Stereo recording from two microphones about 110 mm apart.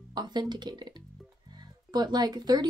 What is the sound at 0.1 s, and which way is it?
A woman's voice, 40° right (ahead or behind).